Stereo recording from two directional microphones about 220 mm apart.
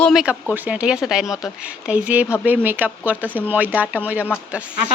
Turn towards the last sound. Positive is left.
turn(degrees=-5)  # may be behind; listen again after turning